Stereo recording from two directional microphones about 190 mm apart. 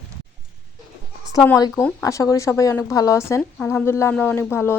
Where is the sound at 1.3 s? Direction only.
15° left (ahead or behind).